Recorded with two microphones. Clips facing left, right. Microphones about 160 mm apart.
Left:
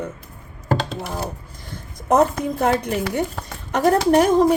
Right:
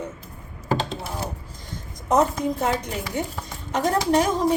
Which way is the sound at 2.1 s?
60° left (ahead or behind).